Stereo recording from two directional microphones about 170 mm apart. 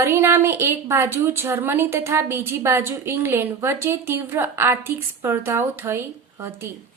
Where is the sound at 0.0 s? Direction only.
15° right (ahead or behind).